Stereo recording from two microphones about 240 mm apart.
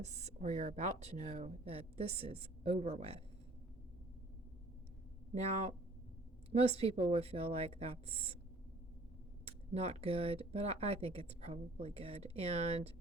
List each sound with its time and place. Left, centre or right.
0.0 s speech: right
5.3 s speech: right
9.7 s speech: right